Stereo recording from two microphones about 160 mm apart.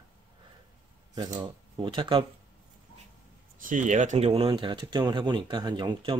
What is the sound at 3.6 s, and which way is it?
Speech, 55° right (ahead or behind).